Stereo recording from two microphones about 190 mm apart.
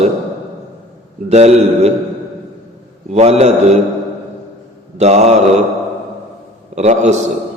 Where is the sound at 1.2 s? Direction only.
35° right (ahead or behind).